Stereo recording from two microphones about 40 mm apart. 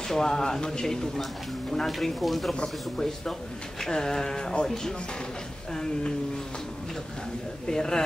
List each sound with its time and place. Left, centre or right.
0.1 s speech: centre
2.0 s speech: centre
2.5 s speech: centre
5.7 s speech: centre
7.6 s speech: centre